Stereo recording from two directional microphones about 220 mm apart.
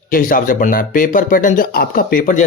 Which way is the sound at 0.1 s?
40° left (ahead or behind).